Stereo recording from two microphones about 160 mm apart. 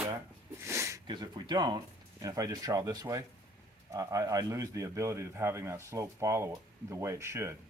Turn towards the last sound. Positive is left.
turn(degrees=-15)  # may be behind; listen again after turning